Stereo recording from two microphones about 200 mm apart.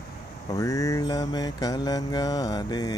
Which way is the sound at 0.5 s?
15° left (ahead or behind).